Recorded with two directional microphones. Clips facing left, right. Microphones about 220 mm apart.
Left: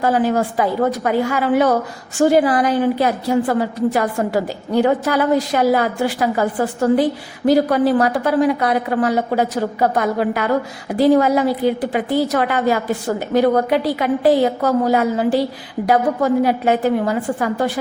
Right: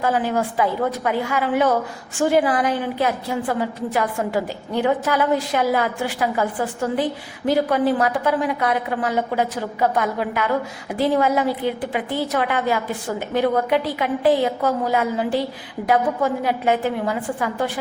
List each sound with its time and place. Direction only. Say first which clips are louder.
0.0 s a woman's voice: left 4 dB; 40° left (ahead or behind)